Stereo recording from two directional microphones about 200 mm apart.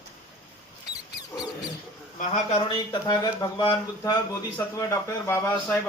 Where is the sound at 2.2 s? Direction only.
35° left (ahead or behind).